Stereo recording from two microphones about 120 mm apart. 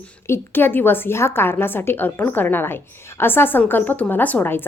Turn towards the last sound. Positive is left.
turn(degrees=15)  # may be behind; listen again after turning